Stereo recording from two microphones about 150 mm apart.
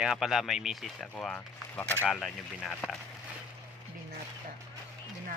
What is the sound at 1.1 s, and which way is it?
Speech, 10° left (ahead or behind).